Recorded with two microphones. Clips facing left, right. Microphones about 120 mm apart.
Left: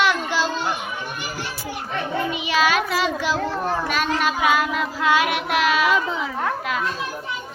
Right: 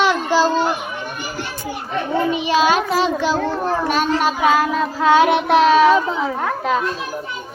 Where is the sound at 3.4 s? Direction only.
35° right (ahead or behind).